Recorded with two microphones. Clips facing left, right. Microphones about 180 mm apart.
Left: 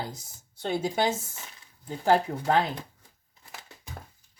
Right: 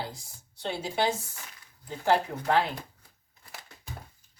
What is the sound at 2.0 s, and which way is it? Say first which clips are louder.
Speech: left 2 dB; 40° left (ahead or behind).